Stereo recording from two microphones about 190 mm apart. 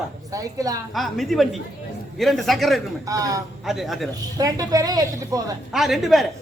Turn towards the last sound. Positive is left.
turn(degrees=0)  # may be behind; listen again after turning